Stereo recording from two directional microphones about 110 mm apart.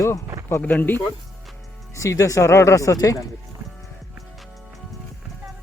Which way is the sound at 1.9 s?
30° left (ahead or behind).